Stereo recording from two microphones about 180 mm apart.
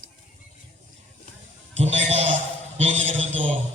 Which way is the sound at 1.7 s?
35° right (ahead or behind).